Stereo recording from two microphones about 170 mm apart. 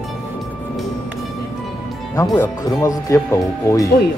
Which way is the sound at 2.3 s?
15° left (ahead or behind).